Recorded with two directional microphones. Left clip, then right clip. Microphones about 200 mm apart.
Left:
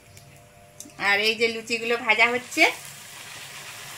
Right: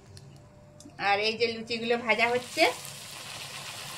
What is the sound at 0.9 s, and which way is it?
A woman's voice, 40° left (ahead or behind).